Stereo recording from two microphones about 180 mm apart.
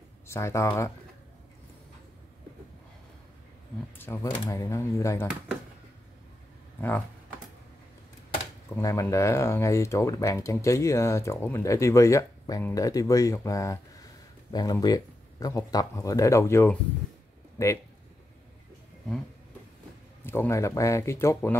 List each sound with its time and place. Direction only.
0.3 s speech: 15° left (ahead or behind)
4.0 s speech: 15° left (ahead or behind)
8.7 s speech: 15° left (ahead or behind)
20.2 s speech: 15° left (ahead or behind)